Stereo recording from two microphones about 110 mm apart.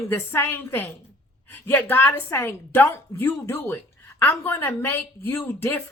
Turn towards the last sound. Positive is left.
turn(degrees=20)  # may be behind; listen again after turning